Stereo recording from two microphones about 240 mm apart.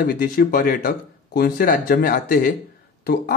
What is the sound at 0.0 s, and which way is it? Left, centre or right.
Speech, left.